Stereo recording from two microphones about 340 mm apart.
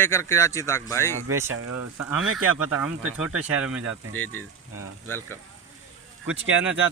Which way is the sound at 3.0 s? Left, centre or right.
Right.